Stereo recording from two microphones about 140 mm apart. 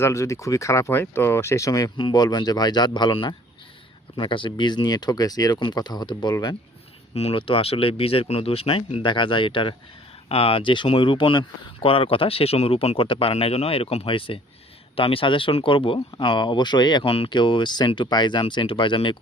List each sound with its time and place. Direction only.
0.0 s speech: 20° left (ahead or behind)
7.1 s speech: 45° left (ahead or behind)